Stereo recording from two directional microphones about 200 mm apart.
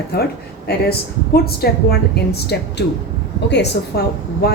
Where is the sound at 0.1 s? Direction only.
55° left (ahead or behind).